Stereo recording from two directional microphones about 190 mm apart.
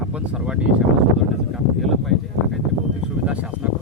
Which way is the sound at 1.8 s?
Centre (ahead or behind).